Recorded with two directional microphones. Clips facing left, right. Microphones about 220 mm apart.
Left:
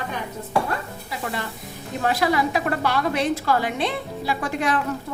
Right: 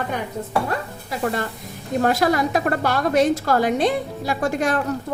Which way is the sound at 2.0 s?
45° right (ahead or behind).